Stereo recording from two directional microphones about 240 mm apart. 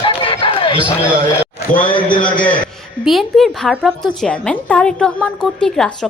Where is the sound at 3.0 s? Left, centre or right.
Centre.